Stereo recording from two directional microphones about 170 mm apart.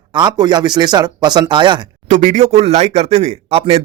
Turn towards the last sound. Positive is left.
turn(degrees=-35)  # may be behind; listen again after turning